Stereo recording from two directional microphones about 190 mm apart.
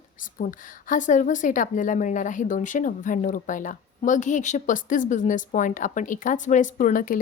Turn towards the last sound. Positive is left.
turn(degrees=45)  # may be behind; listen again after turning